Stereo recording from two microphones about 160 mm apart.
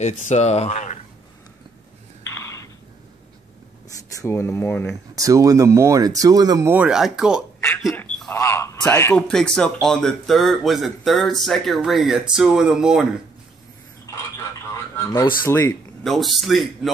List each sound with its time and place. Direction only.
0.0 s speech: 45° left (ahead or behind)
2.3 s a sound: 20° left (ahead or behind)
4.2 s speech: 20° left (ahead or behind)
5.1 s speech: 20° right (ahead or behind)
6.7 s speech: 5° right (ahead or behind)
8.3 s a sound: 15° left (ahead or behind)
9.1 s speech: 5° left (ahead or behind)
15.4 s speech: 15° left (ahead or behind)
16.0 s speech: centre (ahead or behind)